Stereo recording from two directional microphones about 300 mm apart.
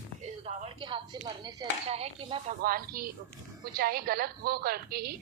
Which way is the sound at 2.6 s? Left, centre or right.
Right.